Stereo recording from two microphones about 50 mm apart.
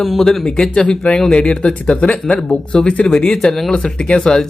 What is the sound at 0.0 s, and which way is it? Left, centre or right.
Speech, centre.